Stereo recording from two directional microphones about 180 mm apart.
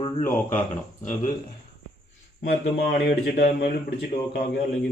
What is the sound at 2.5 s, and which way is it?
Speech, 60° left (ahead or behind).